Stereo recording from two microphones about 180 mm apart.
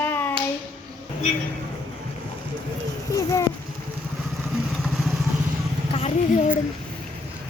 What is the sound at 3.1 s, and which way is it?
Speech, 20° left (ahead or behind).